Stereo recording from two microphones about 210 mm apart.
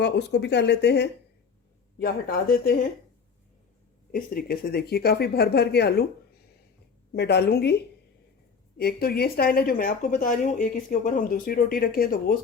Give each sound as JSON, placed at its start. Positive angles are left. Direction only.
{"t": 0.0, "sound": "speech", "side_deg": 55}
{"t": 4.1, "sound": "speech", "side_deg": 45}
{"t": 7.1, "sound": "speech", "side_deg": 50}
{"t": 8.8, "sound": "speech", "side_deg": 50}